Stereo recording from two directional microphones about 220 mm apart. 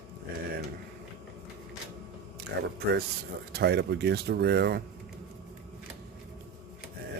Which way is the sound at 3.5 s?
50° right (ahead or behind).